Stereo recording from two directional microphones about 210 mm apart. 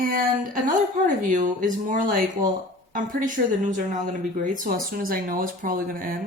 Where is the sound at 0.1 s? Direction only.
40° right (ahead or behind).